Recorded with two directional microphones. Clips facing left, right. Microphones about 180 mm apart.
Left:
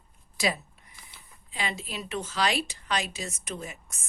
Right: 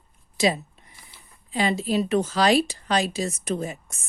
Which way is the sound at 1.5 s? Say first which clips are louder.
Right 11 dB; 35° right (ahead or behind).